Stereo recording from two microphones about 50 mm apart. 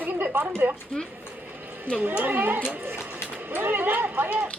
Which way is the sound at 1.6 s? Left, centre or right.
Right.